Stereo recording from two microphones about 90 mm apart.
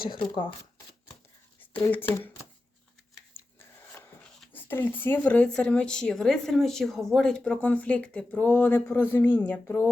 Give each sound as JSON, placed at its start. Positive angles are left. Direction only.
{"t": 1.9, "sound": "speech", "side_deg": 20}
{"t": 4.5, "sound": "speech", "side_deg": 25}